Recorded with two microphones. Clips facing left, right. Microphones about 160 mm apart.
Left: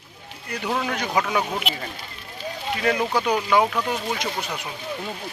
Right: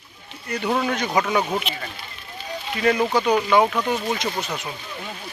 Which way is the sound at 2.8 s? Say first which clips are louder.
Right 3 dB; centre (ahead or behind).